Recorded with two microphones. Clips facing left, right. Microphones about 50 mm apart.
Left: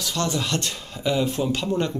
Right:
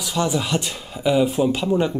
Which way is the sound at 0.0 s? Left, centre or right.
Centre.